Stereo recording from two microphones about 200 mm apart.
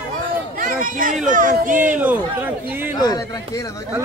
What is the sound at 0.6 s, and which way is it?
Speech, 40° right (ahead or behind).